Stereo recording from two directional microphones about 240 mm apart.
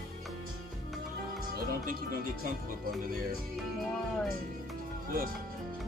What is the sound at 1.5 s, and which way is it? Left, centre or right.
Music, right.